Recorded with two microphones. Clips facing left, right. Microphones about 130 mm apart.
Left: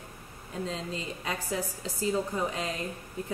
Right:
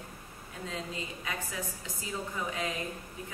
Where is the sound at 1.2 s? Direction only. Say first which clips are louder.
Left 7 dB; 35° left (ahead or behind).